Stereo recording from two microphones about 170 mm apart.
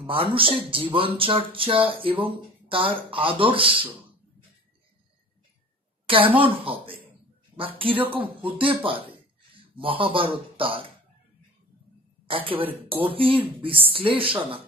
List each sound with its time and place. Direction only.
0.0 s speech: 30° right (ahead or behind)
6.0 s speech: 30° right (ahead or behind)
12.3 s speech: 30° right (ahead or behind)